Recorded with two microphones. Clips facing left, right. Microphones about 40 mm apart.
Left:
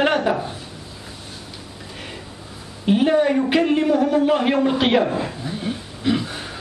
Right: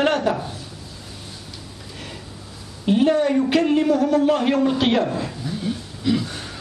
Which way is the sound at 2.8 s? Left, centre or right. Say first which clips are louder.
Left 1 dB; centre.